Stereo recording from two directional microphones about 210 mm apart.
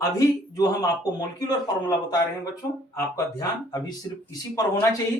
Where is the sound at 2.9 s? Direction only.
15° left (ahead or behind).